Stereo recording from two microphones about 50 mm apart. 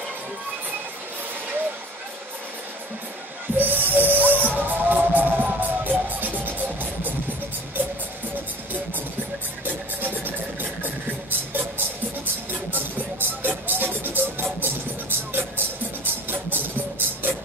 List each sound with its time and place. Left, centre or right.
3.5 s music: right
9.7 s vehicle: right
12.7 s music: right